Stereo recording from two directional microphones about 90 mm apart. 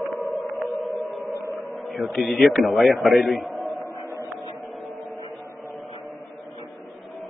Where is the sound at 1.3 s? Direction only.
35° right (ahead or behind).